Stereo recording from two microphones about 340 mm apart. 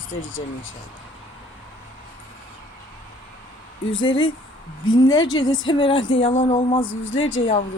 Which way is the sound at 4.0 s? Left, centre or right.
Centre.